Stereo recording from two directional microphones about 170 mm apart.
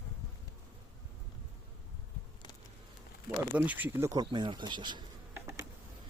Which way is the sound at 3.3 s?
10° right (ahead or behind).